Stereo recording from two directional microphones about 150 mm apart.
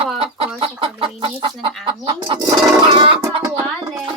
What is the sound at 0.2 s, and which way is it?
Chicken, 35° right (ahead or behind).